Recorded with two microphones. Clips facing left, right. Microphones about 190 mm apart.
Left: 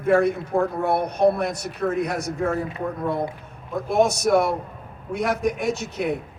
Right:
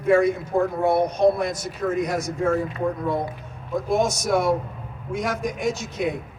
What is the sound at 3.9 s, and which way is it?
A man's voice, 60° left (ahead or behind).